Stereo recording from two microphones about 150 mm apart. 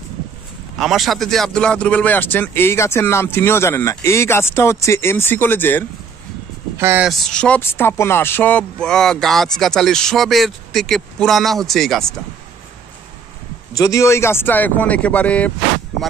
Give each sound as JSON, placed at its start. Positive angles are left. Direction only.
{"t": 0.7, "sound": "speech", "side_deg": 0}
{"t": 6.8, "sound": "speech", "side_deg": -15}
{"t": 7.1, "sound": "speech", "side_deg": 5}
{"t": 13.7, "sound": "speech", "side_deg": 20}